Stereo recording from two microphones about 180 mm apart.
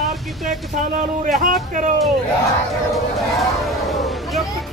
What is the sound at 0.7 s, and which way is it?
Speech, 55° right (ahead or behind).